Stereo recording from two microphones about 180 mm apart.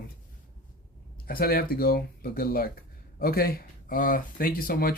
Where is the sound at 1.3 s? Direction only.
55° left (ahead or behind).